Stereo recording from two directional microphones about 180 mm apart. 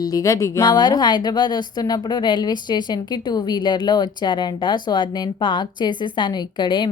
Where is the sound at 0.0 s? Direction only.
20° left (ahead or behind).